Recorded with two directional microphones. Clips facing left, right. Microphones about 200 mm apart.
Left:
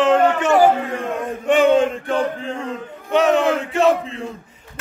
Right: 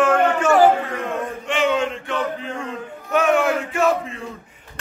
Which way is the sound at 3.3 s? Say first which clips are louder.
Left 1 dB; 20° left (ahead or behind).